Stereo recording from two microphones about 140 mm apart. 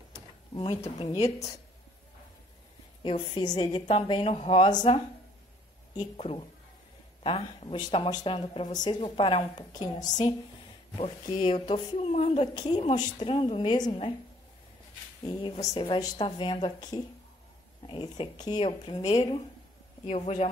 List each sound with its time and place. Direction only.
0.1 s a sound: 30° left (ahead or behind)
1.0 s speech: 50° left (ahead or behind)
3.0 s speech: 35° left (ahead or behind)
12.5 s speech: 30° left (ahead or behind)
15.6 s speech: 30° left (ahead or behind)
19.0 s speech: 25° left (ahead or behind)
20.1 s speech: 50° left (ahead or behind)